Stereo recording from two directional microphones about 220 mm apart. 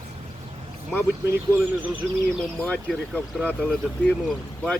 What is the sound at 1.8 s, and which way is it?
Speech, 5° right (ahead or behind).